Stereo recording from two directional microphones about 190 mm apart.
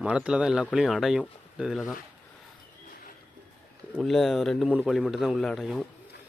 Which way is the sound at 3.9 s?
Centre (ahead or behind).